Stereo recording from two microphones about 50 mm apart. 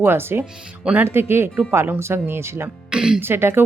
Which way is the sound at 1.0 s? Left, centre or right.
Right.